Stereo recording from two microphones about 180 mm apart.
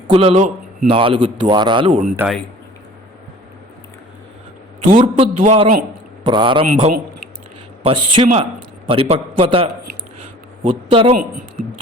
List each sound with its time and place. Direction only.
0.1 s a man's voice: 35° right (ahead or behind)
0.9 s a man's voice: 30° right (ahead or behind)
2.2 s speech: 10° right (ahead or behind)
4.9 s a man's voice: 30° right (ahead or behind)
6.2 s a man's voice: 25° right (ahead or behind)
10.7 s a man's voice: 30° right (ahead or behind)